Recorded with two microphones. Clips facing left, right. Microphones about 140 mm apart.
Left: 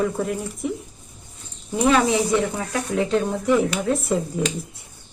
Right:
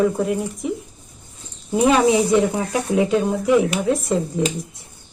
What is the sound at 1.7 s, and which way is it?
Speech, 20° right (ahead or behind).